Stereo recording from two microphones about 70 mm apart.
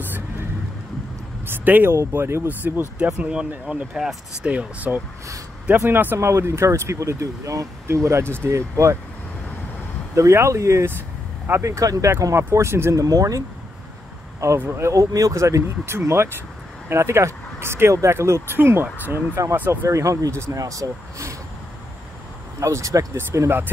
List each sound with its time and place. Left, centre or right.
0.0 s vehicle: right
2.1 s speech: right
2.4 s speech: right
3.2 s speech: centre
4.5 s speech: right
6.1 s speech: right
10.1 s speech: right
12.4 s speech: right
12.9 s speech: right
14.6 s speech: right
19.4 s speech: right
22.6 s speech: right